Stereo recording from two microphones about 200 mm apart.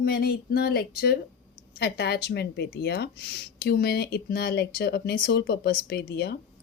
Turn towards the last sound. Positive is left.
turn(degrees=50)  # may be behind; listen again after turning